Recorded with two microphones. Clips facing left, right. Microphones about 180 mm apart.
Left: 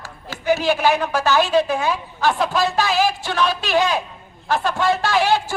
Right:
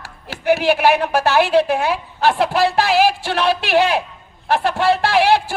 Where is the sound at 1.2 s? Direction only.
65° right (ahead or behind).